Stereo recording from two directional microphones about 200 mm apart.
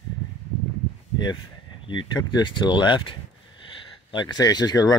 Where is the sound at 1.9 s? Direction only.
20° left (ahead or behind).